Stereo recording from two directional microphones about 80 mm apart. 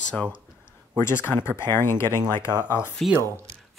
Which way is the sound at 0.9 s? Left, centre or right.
Left.